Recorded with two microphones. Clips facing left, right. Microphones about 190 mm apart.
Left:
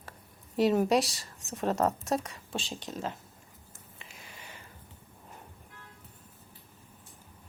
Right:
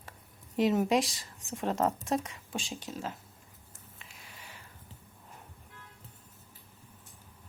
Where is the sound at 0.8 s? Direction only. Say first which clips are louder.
Left 2 dB; 20° right (ahead or behind).